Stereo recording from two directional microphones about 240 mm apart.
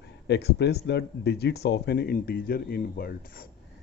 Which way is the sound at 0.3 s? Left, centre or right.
Left.